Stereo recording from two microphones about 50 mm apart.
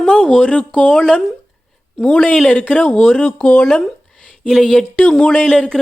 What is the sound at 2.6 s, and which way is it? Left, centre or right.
Speech, left.